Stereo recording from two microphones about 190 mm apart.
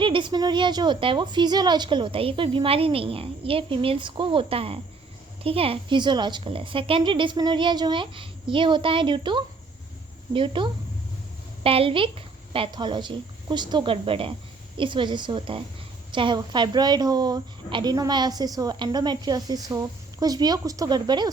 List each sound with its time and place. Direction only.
0.0 s a woman's voice: 25° right (ahead or behind)